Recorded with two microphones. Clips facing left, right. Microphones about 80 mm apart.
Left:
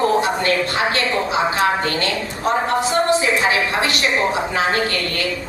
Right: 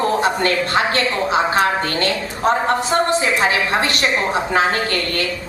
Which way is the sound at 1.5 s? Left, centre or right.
Right.